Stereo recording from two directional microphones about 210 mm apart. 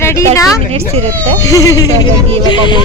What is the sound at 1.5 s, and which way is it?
Speech, 15° left (ahead or behind).